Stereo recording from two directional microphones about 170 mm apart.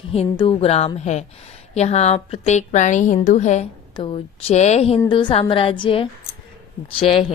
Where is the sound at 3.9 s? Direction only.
30° left (ahead or behind).